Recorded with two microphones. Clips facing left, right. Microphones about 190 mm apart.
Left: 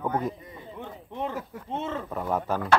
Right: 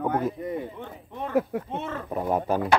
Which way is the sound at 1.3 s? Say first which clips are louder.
Right 11 dB; 65° right (ahead or behind).